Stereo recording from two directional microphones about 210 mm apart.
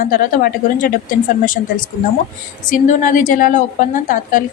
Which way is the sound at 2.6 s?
40° left (ahead or behind).